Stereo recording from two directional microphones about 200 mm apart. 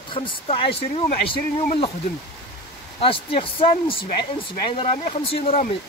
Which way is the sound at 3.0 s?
25° left (ahead or behind).